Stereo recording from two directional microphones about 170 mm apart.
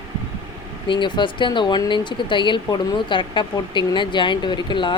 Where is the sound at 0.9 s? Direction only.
30° left (ahead or behind).